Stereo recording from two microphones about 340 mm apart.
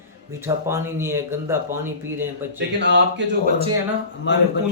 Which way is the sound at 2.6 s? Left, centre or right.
Right.